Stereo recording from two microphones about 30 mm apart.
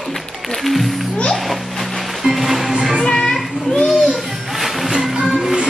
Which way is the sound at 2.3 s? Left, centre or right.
Centre.